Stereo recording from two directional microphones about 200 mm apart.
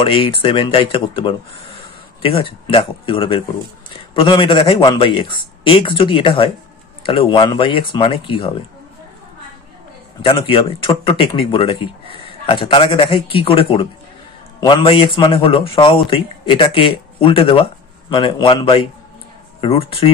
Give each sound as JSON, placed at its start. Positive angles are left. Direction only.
{"t": 0.0, "sound": "speech", "side_deg": 25}
{"t": 10.2, "sound": "speech", "side_deg": 25}